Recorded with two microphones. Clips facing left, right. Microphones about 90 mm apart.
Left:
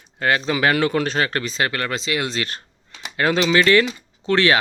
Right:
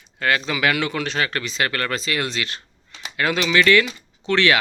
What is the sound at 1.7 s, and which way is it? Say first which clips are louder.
Speech: left 1 dB; 20° left (ahead or behind).